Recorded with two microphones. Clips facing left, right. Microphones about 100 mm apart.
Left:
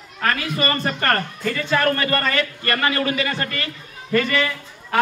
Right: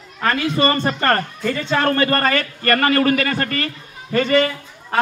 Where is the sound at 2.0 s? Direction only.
45° right (ahead or behind).